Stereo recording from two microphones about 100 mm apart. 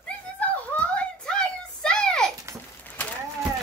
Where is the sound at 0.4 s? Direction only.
15° left (ahead or behind).